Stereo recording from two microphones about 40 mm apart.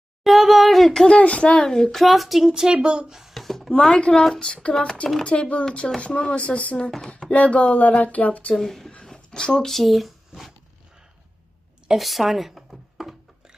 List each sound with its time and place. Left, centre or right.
0.3 s speech: centre
1.0 s a woman's voice: left; by 2.7 s centre
2.7 s speech: right
3.1 s speech: centre
3.3 s a sound: centre
3.7 s speech: centre; by 8.5 s left
8.5 s a woman's voice: centre
9.0 s a sound: centre
9.7 s speech: centre
11.9 s speech: centre